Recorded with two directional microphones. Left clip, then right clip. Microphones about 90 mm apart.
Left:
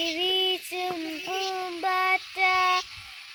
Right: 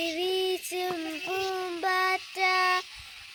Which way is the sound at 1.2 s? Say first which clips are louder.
Left 1 dB; 40° right (ahead or behind).